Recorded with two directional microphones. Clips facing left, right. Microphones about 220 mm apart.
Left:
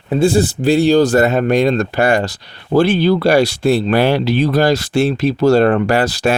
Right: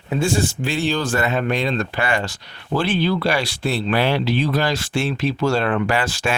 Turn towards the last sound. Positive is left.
turn(degrees=35)  # may be behind; listen again after turning